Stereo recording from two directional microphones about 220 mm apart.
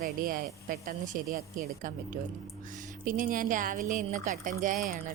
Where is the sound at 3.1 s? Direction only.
40° right (ahead or behind).